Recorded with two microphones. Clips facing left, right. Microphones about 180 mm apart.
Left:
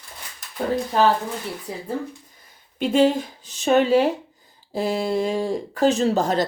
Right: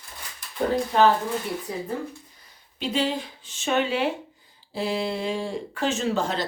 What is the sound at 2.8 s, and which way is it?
Speech, 50° left (ahead or behind).